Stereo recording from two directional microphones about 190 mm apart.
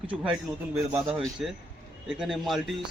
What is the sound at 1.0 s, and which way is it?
A man's voice, centre (ahead or behind).